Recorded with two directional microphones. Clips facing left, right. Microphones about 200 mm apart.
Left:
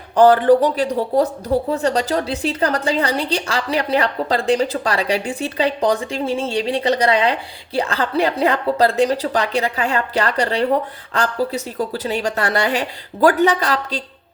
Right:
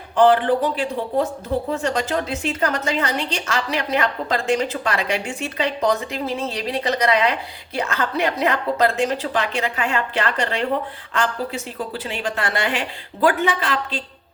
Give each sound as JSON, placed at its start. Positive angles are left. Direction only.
{"t": 0.2, "sound": "a woman's voice", "side_deg": 40}